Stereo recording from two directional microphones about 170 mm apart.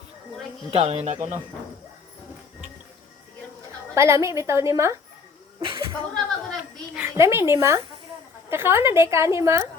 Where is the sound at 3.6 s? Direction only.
15° right (ahead or behind).